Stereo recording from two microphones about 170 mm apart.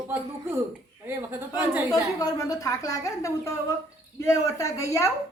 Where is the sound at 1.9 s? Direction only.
20° left (ahead or behind).